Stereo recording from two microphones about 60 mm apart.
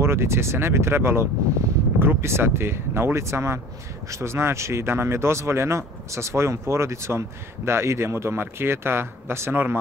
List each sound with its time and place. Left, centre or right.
0.0 s speech: right